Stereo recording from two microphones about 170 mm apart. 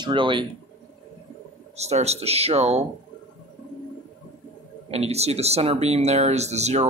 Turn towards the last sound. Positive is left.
turn(degrees=-40)  # may be behind; listen again after turning